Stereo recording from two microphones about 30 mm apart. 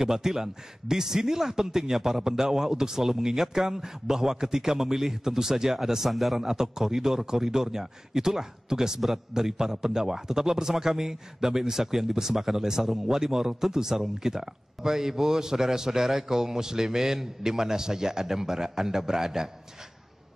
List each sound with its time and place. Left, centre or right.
0.0 s a man's voice: centre
6.4 s speech: centre